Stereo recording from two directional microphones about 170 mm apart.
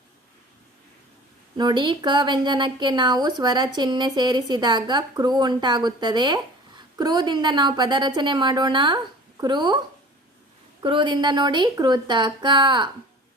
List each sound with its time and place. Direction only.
1.5 s a woman's voice: 25° right (ahead or behind)